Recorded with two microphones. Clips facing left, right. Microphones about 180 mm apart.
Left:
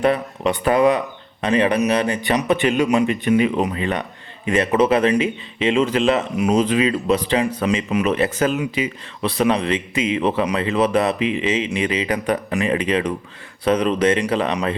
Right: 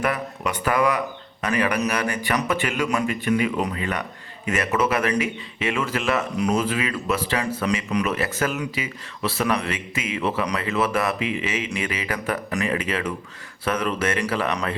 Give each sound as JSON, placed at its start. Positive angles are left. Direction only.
{"t": 0.0, "sound": "speech", "side_deg": 25}